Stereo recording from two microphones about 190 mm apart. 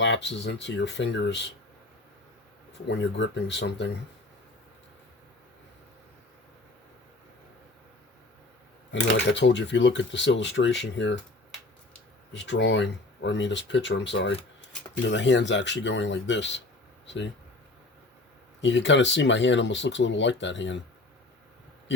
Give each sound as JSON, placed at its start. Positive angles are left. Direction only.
{"t": 0.0, "sound": "speech", "side_deg": 70}
{"t": 2.8, "sound": "speech", "side_deg": 70}
{"t": 8.9, "sound": "speech", "side_deg": 70}
{"t": 12.3, "sound": "speech", "side_deg": 70}
{"t": 18.6, "sound": "speech", "side_deg": 75}